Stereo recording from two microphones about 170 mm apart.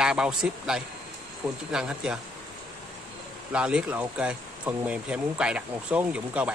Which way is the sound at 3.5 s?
5° right (ahead or behind).